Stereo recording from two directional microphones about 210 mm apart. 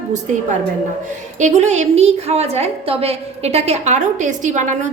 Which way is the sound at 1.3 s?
35° right (ahead or behind).